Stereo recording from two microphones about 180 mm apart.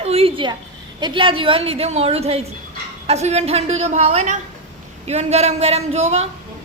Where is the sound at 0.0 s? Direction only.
35° right (ahead or behind).